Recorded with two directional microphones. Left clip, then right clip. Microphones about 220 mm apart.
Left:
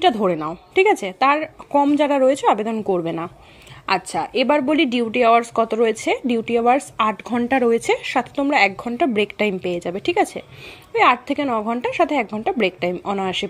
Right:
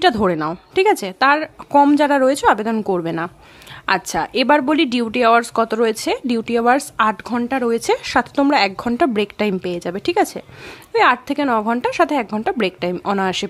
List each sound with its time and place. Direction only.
0.2 s a woman's voice: 15° right (ahead or behind)